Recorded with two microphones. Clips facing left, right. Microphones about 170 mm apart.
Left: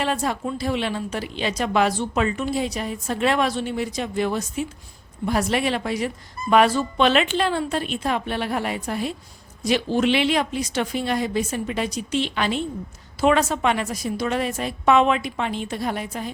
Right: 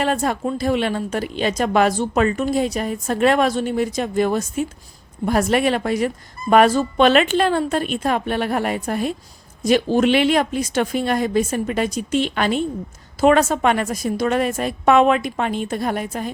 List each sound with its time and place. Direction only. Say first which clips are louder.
0.0 s a woman's voice: right 4 dB; 50° right (ahead or behind)